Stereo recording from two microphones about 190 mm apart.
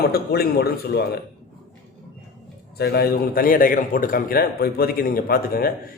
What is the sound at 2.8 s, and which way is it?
A man's voice, 55° left (ahead or behind).